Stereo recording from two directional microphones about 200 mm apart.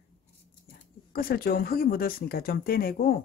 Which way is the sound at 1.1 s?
50° left (ahead or behind).